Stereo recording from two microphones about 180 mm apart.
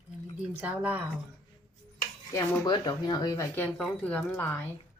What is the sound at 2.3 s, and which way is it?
Speech, 20° left (ahead or behind).